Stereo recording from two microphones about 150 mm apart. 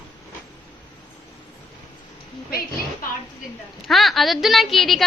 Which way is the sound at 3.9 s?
Centre (ahead or behind).